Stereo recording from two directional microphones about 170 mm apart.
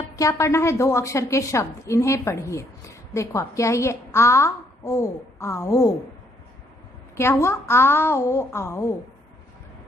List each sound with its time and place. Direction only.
0.2 s a woman's voice: 15° left (ahead or behind)
7.2 s a woman's voice: 15° left (ahead or behind)